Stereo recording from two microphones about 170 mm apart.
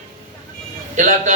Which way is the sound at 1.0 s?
45° right (ahead or behind).